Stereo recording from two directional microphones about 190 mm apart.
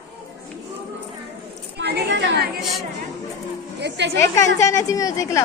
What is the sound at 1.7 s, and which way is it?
Speech, 60° right (ahead or behind).